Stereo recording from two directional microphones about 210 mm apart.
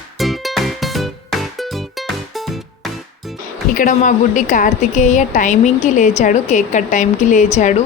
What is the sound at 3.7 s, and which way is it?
A woman's voice, 35° left (ahead or behind).